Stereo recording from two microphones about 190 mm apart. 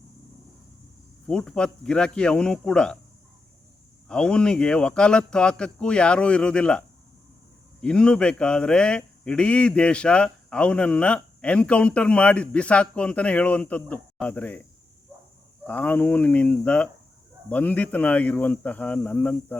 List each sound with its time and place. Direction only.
1.3 s speech: 5° left (ahead or behind)
4.1 s speech: 5° left (ahead or behind)
15.6 s speech: 10° left (ahead or behind)